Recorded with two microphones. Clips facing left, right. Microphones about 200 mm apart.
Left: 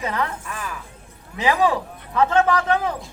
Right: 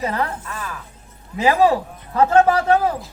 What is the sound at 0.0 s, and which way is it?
Speech, 35° right (ahead or behind).